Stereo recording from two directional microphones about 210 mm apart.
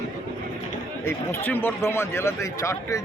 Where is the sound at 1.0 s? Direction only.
10° left (ahead or behind).